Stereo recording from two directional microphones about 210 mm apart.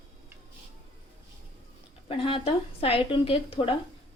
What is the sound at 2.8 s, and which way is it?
Speech, 25° left (ahead or behind).